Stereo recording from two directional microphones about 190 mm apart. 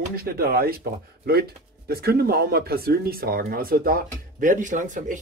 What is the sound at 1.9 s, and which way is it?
Speech, 55° right (ahead or behind).